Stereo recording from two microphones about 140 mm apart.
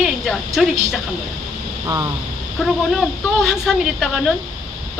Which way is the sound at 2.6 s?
Centre (ahead or behind).